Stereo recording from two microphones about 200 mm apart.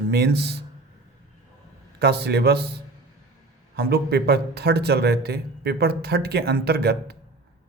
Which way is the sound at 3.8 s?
50° right (ahead or behind).